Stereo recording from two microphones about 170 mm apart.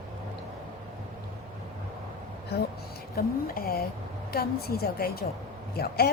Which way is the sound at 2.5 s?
70° left (ahead or behind).